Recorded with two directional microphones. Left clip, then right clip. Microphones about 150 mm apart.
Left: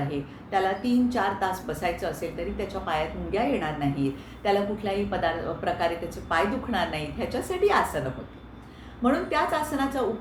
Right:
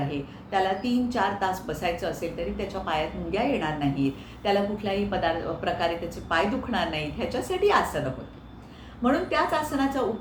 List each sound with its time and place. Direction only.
0.1 s a woman's voice: 5° right (ahead or behind)
9.0 s a woman's voice: 5° right (ahead or behind)